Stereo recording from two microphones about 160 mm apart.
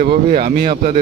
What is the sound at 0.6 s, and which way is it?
Speech, 45° right (ahead or behind).